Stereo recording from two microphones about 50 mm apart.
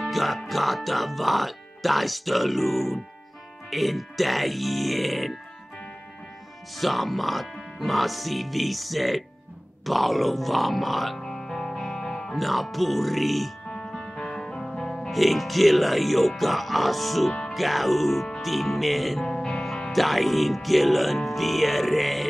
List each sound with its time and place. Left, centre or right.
0.1 s speech: centre
6.8 s speech: centre
11.2 s music: centre
12.4 s speech: centre
13.7 s music: centre
17.3 s music: centre
17.6 s speech: centre
19.2 s music: centre
19.9 s speech: centre